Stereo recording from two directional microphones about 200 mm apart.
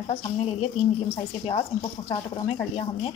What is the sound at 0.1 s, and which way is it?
A woman's voice, 30° left (ahead or behind).